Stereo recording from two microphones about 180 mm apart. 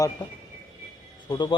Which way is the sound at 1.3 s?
25° left (ahead or behind).